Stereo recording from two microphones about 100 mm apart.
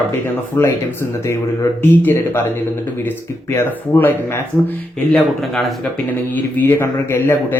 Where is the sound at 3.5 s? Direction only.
20° left (ahead or behind).